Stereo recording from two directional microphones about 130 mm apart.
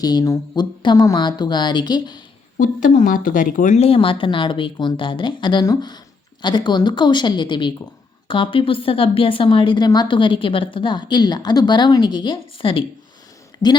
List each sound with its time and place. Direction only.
0.0 s a woman's voice: 30° left (ahead or behind)
2.6 s speech: 90° left
3.8 s a woman's voice: 45° left (ahead or behind)